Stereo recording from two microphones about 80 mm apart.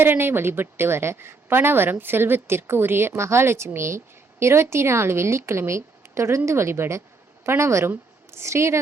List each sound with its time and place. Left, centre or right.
0.0 s a woman's voice: right